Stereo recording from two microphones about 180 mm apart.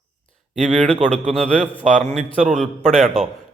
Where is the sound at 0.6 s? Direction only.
35° right (ahead or behind).